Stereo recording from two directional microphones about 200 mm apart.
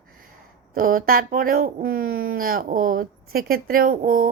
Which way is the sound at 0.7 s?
45° right (ahead or behind).